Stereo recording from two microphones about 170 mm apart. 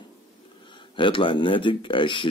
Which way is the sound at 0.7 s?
30° left (ahead or behind).